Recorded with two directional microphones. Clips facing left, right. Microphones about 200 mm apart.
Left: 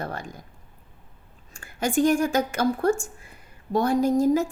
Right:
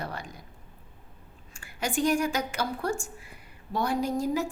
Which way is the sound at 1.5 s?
45° left (ahead or behind).